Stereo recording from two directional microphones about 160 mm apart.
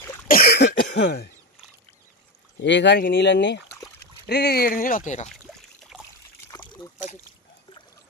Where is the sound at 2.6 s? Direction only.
90° left; by 5.3 s 45° left (ahead or behind).